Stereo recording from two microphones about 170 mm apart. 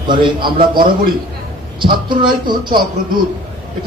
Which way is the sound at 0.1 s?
30° right (ahead or behind).